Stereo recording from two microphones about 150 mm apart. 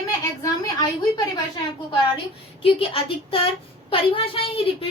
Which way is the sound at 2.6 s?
35° left (ahead or behind).